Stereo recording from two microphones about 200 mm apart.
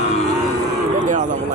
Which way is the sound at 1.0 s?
40° right (ahead or behind).